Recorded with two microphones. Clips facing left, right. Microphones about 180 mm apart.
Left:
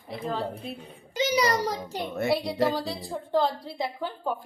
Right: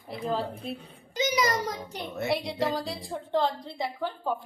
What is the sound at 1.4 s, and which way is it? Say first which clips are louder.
Speech: left 2 dB; 35° left (ahead or behind).